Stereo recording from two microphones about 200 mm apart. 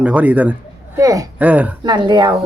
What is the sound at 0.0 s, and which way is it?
Speech, 5° right (ahead or behind).